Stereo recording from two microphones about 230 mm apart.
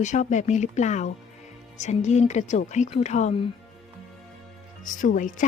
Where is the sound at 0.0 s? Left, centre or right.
Left.